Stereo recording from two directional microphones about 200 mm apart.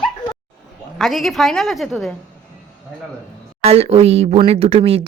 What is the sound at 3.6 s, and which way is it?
Speech, 30° right (ahead or behind).